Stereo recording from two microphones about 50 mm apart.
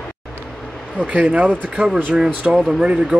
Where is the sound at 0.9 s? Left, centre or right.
Right.